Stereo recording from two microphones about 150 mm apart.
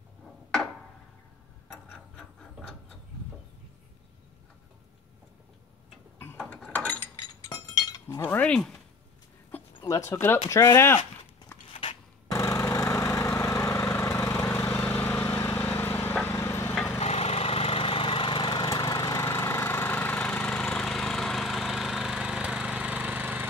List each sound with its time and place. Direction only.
6.5 s a sound: 10° left (ahead or behind)
7.8 s chink: 25° left (ahead or behind)
8.2 s a sound: 10° left (ahead or behind)
9.8 s speech: 20° left (ahead or behind)
12.3 s lawn mower: 20° left (ahead or behind)
14.4 s vehicle: 10° left (ahead or behind)
17.0 s lawn mower: 45° left (ahead or behind); by 23.4 s 10° right (ahead or behind)